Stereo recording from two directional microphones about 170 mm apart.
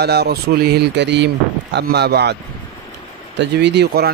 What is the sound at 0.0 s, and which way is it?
Mantra, 70° right (ahead or behind).